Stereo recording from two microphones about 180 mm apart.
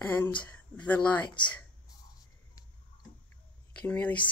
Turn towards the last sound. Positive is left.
turn(degrees=10)  # may be behind; listen again after turning